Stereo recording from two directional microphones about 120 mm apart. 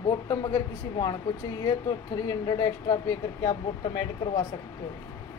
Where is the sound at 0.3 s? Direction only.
25° left (ahead or behind).